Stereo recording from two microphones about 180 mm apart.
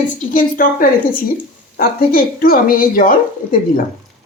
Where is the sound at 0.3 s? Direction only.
50° left (ahead or behind).